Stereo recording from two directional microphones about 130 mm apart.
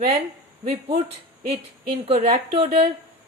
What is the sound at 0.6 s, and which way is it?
A woman's voice, 50° right (ahead or behind).